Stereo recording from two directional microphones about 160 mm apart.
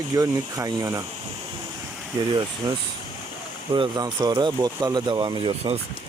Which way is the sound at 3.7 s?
30° right (ahead or behind).